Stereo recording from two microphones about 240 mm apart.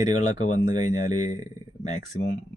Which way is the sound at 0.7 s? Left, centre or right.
Left.